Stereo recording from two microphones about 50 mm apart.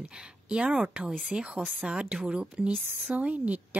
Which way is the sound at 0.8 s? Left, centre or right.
Right.